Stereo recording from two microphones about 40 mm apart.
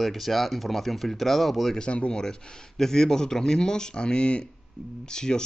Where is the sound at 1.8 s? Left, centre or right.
Left.